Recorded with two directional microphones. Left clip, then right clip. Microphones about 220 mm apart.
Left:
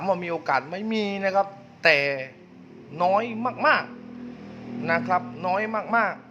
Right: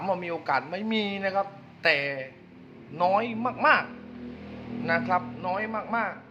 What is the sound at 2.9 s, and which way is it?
A man's voice, 10° left (ahead or behind).